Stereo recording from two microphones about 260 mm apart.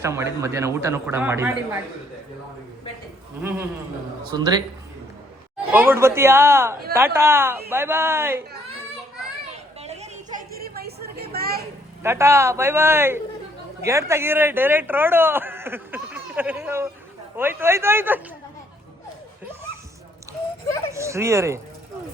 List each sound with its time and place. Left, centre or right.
0.0 s speech: centre
4.3 s speech: centre
5.7 s speech: centre
9.8 s a sound: right
10.8 s vehicle: right
12.0 s speech: centre
20.9 s speech: centre